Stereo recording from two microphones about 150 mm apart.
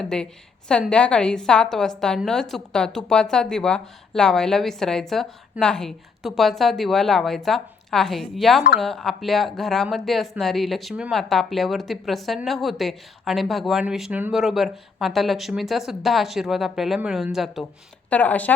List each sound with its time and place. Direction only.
0.0 s speech: 5° left (ahead or behind)
18.1 s speech: 10° left (ahead or behind)